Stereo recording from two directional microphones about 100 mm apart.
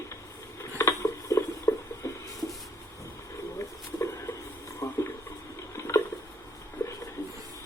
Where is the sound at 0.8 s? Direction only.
30° left (ahead or behind).